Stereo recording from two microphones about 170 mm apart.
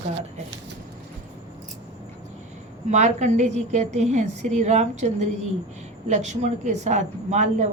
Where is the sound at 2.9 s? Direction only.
45° right (ahead or behind).